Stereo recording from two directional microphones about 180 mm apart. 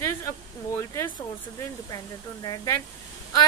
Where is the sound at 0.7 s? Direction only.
15° left (ahead or behind).